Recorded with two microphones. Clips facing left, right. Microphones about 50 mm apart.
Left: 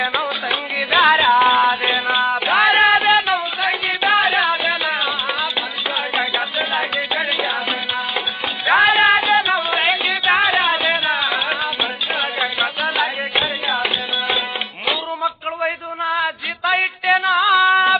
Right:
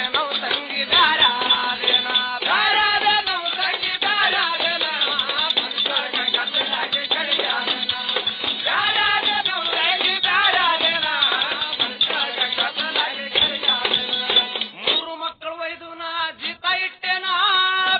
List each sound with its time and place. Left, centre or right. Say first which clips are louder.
0.2 s music: left 2 dB; left
1.3 s music: left 9 dB; left
3.0 s a sound: left 4 dB; left
4.3 s music: left 4 dB; left
6.6 s music: left 4 dB; left
8.6 s music: left 8 dB; left
9.0 s music: left 6 dB; left
15.2 s a sound: left 7 dB; left
17.5 s music: left 8 dB; left